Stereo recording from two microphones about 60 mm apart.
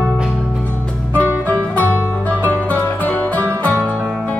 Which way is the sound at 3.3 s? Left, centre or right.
Left.